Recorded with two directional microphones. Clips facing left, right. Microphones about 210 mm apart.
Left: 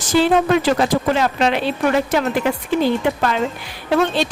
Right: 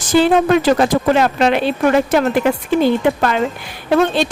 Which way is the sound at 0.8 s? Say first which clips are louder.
Right 3 dB; 55° right (ahead or behind).